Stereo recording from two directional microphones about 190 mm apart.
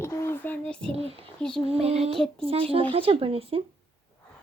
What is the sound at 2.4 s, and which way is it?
Speech, 30° right (ahead or behind).